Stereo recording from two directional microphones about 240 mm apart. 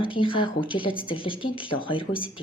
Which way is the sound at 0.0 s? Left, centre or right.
Left.